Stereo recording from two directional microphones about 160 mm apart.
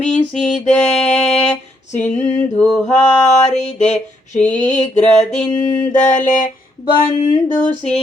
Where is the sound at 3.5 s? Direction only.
45° left (ahead or behind).